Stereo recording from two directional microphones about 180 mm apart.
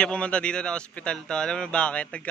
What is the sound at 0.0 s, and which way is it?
A man's voice, 5° left (ahead or behind).